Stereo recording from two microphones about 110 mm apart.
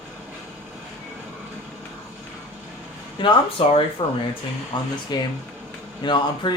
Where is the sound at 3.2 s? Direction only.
45° left (ahead or behind).